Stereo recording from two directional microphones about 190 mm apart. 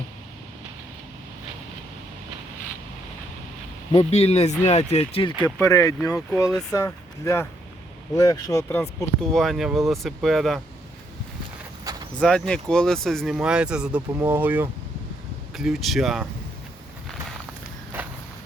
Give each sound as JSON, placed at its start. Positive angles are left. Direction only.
{"t": 3.9, "sound": "speech", "side_deg": 35}
{"t": 5.4, "sound": "speech", "side_deg": 10}
{"t": 6.5, "sound": "speech", "side_deg": 0}
{"t": 6.8, "sound": "speech", "side_deg": 15}
{"t": 9.3, "sound": "speech", "side_deg": 0}
{"t": 11.9, "sound": "a sound", "side_deg": -20}
{"t": 12.2, "sound": "speech", "side_deg": 5}